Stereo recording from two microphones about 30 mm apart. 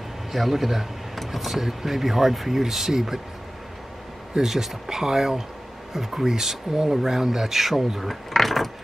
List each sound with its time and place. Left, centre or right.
0.3 s speech: centre
4.4 s speech: centre
8.3 s mechanisms: centre